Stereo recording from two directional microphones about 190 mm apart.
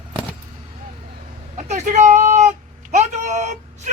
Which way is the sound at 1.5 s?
40° right (ahead or behind).